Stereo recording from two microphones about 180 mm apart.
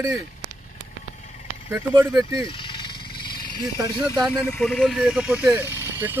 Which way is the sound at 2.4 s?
30° left (ahead or behind).